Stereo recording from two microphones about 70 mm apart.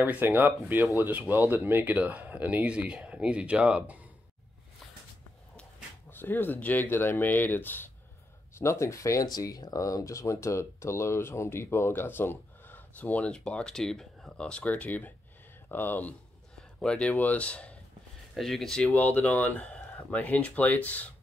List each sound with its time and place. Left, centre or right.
0.0 s speech: right
6.0 s speech: left
8.5 s speech: left
9.3 s speech: left
16.8 s speech: centre
18.3 s speech: centre
18.9 s speech: left